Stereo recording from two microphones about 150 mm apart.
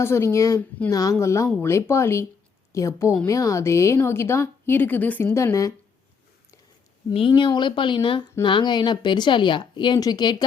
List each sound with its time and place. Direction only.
0.0 s a woman's voice: 15° left (ahead or behind)
7.1 s speech: 35° left (ahead or behind)